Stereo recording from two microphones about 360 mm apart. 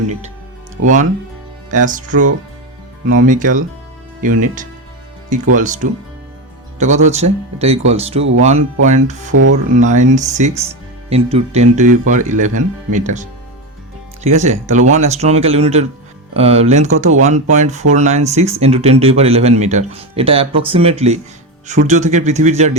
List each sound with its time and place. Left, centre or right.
1.7 s speech: right
9.3 s speech: right
9.7 s speech: centre
14.3 s speech: centre